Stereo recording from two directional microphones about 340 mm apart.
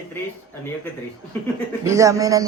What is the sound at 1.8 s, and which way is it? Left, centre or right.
Speech, centre.